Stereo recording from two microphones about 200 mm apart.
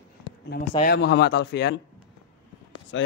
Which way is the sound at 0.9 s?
60° left (ahead or behind).